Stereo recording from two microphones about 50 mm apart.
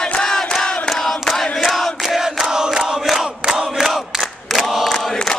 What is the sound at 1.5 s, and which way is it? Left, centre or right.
Crowd, centre.